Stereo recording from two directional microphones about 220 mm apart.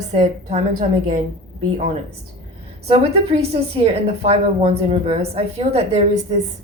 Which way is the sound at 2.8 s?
25° right (ahead or behind).